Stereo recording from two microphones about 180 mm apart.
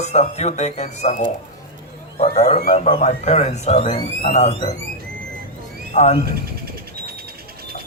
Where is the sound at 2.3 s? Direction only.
35° left (ahead or behind).